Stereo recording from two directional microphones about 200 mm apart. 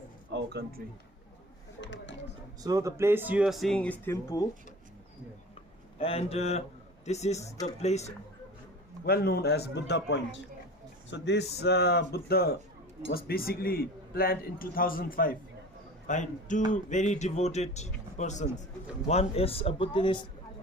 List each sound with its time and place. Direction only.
0.3 s speech: 65° right (ahead or behind)
1.8 s a sound: 65° left (ahead or behind)
2.6 s speech: 15° right (ahead or behind); by 4.4 s 15° left (ahead or behind)
6.0 s speech: 30° left (ahead or behind)
9.0 s a man's voice: 50° left (ahead or behind); by 20.2 s 25° left (ahead or behind)